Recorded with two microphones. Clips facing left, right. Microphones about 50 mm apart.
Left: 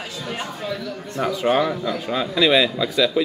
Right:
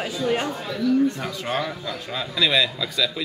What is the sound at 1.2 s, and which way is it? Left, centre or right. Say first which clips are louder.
A man's voice: left 7 dB; left.